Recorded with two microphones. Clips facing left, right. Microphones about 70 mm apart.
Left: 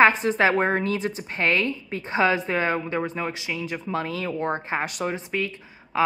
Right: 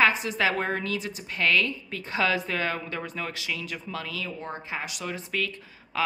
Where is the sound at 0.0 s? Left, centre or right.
Left.